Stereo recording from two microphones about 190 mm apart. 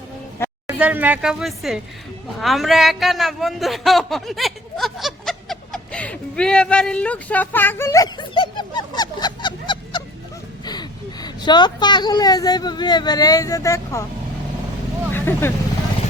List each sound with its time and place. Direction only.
0.7 s a woman's voice: 10° right (ahead or behind); by 14.0 s 15° left (ahead or behind)
15.1 s vehicle: 10° left (ahead or behind)